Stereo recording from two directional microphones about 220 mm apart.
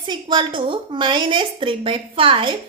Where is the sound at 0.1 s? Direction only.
20° right (ahead or behind).